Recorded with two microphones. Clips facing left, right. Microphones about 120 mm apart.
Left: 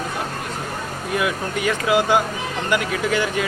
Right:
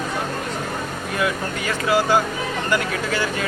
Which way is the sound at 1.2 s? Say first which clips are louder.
Even; 15° left (ahead or behind).